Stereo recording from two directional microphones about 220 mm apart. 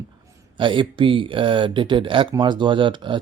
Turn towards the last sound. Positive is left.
turn(degrees=-20)  # may be behind; listen again after turning